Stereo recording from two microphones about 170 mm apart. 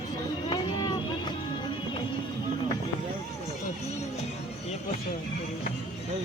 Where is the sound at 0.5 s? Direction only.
25° left (ahead or behind).